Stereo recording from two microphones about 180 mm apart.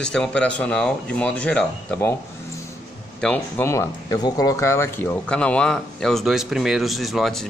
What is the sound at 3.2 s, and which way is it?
A man's voice, 5° left (ahead or behind).